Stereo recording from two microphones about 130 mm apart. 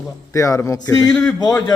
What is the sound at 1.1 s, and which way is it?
Speech, 5° left (ahead or behind).